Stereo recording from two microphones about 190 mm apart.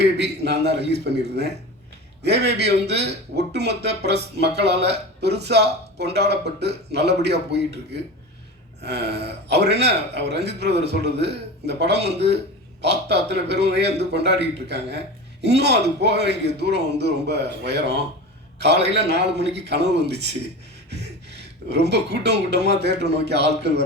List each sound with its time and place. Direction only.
0.0 s speech: 60° right (ahead or behind)
8.8 s speech: 60° right (ahead or behind)
21.7 s speech: 60° right (ahead or behind)